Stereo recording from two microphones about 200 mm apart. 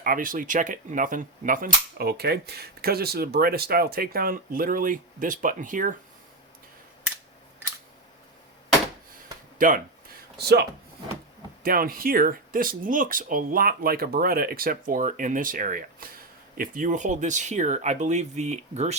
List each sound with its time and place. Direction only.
0.0 s speech: 45° right (ahead or behind)
9.6 s speech: 40° right (ahead or behind)
10.3 s speech: 55° right (ahead or behind); by 18.9 s 35° right (ahead or behind)